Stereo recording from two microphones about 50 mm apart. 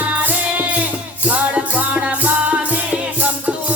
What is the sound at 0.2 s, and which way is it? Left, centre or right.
Music, right.